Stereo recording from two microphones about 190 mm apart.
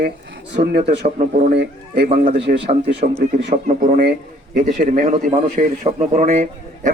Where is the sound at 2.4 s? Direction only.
65° right (ahead or behind).